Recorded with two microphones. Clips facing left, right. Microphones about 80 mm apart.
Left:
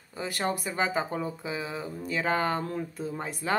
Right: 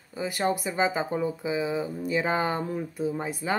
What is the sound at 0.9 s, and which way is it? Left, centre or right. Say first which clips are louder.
Speech: right 3 dB; centre.